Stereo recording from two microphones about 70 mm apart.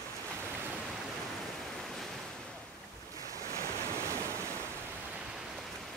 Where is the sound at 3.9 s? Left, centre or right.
Right.